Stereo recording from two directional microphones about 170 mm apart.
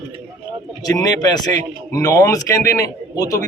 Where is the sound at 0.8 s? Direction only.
20° left (ahead or behind).